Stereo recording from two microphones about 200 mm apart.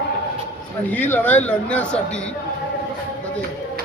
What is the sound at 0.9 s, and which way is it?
Speech, 10° left (ahead or behind).